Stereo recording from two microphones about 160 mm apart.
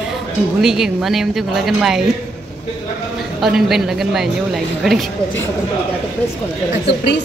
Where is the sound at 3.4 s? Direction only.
5° right (ahead or behind).